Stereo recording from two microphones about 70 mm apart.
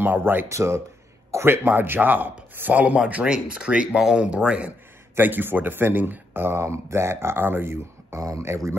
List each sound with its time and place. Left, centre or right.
0.0 s a man's voice: right
0.5 s speech: right
1.3 s a man's voice: right; by 4.7 s centre
5.1 s speech: right
8.2 s speech: right